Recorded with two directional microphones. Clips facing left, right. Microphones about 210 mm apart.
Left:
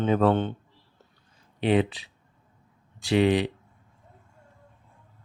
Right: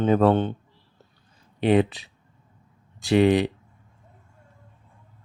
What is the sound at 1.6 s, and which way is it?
Speech, 45° right (ahead or behind).